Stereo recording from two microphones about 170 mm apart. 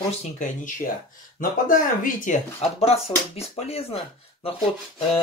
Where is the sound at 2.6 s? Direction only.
35° left (ahead or behind).